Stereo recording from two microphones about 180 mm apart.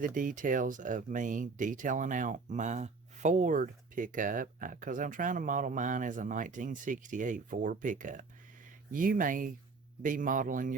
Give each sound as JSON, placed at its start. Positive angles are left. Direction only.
{"t": 0.0, "sound": "speech", "side_deg": -45}